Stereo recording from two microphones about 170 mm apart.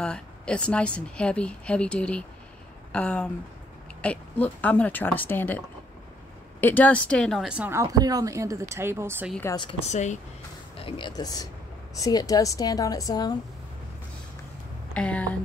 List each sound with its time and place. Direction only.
0.0 s speech: 5° left (ahead or behind)
6.6 s a woman's voice: 10° left (ahead or behind); by 9.3 s 15° right (ahead or behind)
9.8 s speech: 45° left (ahead or behind)
10.8 s a woman's voice: 30° left (ahead or behind)
15.0 s speech: 10° left (ahead or behind)